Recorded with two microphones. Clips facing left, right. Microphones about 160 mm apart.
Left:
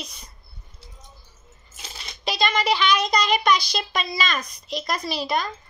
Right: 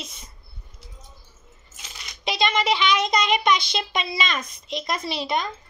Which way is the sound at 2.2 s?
25° right (ahead or behind).